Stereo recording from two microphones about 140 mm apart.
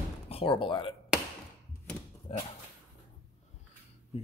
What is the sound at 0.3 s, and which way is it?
Speech, 40° left (ahead or behind).